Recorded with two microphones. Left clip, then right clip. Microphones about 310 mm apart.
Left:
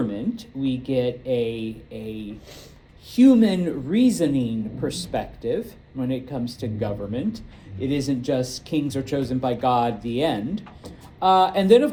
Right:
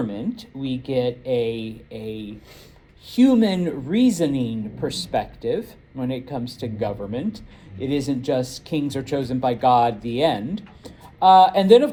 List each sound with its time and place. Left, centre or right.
0.1 s speech: right